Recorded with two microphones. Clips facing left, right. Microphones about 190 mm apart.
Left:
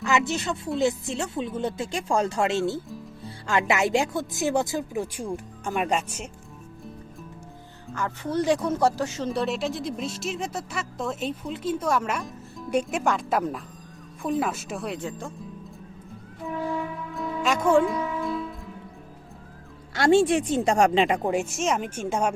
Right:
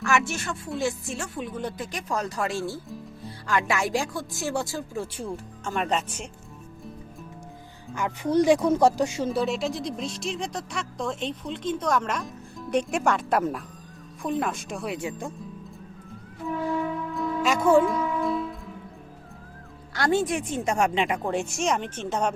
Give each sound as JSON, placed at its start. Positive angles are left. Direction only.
{"t": 0.0, "sound": "speech", "side_deg": 20}
{"t": 7.9, "sound": "speech", "side_deg": -15}
{"t": 9.3, "sound": "speech", "side_deg": 0}
{"t": 14.9, "sound": "speech", "side_deg": -10}
{"t": 17.2, "sound": "music", "side_deg": 0}
{"t": 19.9, "sound": "speech", "side_deg": 25}
{"t": 21.2, "sound": "speech", "side_deg": 5}